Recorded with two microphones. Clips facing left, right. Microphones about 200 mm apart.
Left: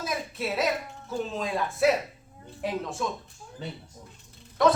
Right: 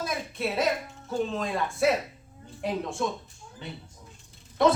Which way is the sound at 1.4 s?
Centre (ahead or behind).